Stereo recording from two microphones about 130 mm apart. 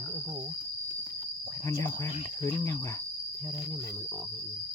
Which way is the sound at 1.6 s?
20° left (ahead or behind).